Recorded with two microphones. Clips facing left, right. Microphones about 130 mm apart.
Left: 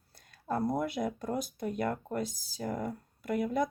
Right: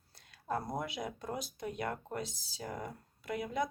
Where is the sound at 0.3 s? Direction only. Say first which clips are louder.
Left 6 dB; 45° left (ahead or behind).